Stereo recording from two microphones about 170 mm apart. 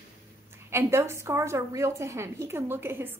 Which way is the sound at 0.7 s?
15° right (ahead or behind).